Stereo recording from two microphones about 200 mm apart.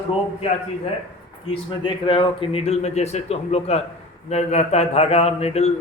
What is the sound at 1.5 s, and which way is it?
A man's voice, 25° left (ahead or behind).